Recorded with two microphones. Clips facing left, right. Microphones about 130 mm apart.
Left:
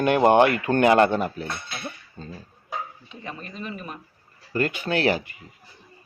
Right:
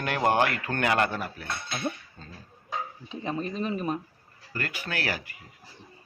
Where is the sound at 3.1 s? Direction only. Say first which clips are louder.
Right 6 dB; 30° right (ahead or behind).